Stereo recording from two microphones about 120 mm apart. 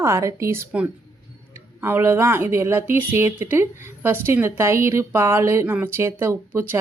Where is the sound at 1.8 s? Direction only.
20° right (ahead or behind).